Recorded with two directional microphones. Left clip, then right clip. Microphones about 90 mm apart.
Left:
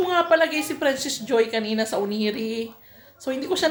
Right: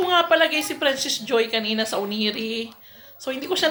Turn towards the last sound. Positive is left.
turn(degrees=30)  # may be behind; listen again after turning